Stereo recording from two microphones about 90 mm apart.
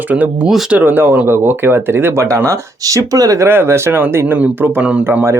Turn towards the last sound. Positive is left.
turn(degrees=-30)  # may be behind; listen again after turning